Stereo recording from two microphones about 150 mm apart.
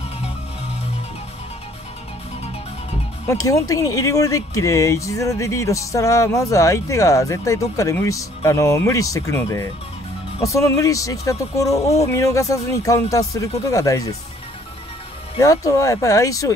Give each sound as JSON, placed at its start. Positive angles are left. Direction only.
{"t": 3.3, "sound": "speech", "side_deg": 20}
{"t": 15.3, "sound": "speech", "side_deg": 20}